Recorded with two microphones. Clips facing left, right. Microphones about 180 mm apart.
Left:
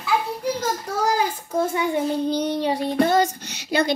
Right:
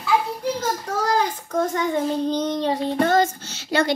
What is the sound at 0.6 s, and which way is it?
A child's voice, 10° left (ahead or behind).